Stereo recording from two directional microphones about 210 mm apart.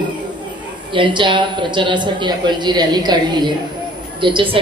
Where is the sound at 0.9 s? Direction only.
20° right (ahead or behind).